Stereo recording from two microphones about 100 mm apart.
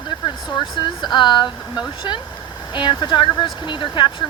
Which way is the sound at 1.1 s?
50° left (ahead or behind).